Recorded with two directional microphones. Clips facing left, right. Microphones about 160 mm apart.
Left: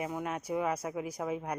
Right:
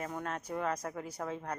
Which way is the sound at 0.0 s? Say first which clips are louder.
Left 3 dB; 10° left (ahead or behind).